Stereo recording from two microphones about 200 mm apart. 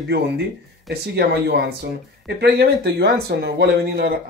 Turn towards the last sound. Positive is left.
turn(degrees=-55)  # may be behind; listen again after turning